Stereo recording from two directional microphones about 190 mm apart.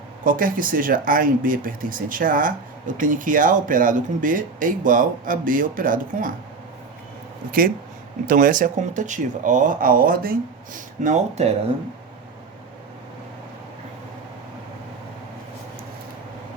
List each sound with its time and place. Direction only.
0.3 s speech: 45° right (ahead or behind)
8.3 s speech: 45° right (ahead or behind)